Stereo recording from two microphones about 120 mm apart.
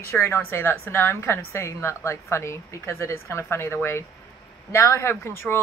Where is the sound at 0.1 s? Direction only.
20° left (ahead or behind).